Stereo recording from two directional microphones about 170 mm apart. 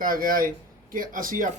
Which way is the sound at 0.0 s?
55° right (ahead or behind).